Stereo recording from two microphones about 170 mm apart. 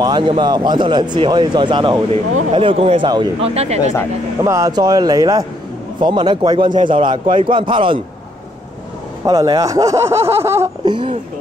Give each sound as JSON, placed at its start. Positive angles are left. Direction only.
{"t": 0.0, "sound": "a man's voice", "side_deg": -25}
{"t": 4.5, "sound": "a man's voice", "side_deg": -20}
{"t": 9.2, "sound": "speech", "side_deg": -20}
{"t": 10.9, "sound": "a man's voice", "side_deg": -30}